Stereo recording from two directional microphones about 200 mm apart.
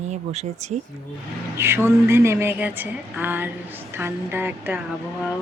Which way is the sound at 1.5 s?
10° right (ahead or behind).